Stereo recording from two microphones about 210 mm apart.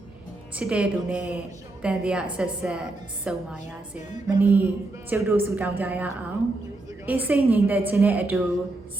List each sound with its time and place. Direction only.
0.5 s a woman's voice: 5° right (ahead or behind)